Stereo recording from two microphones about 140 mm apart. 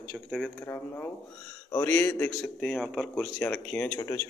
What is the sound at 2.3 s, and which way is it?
A man's voice, 5° left (ahead or behind).